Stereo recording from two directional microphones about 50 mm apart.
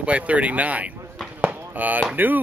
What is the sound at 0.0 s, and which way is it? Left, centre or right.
Speech, right.